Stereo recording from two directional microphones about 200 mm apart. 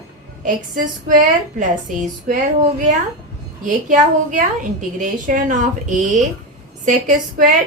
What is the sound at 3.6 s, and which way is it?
A woman's voice, 40° right (ahead or behind).